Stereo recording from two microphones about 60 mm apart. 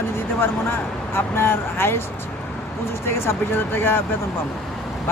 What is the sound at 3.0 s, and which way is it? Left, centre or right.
Speech, left.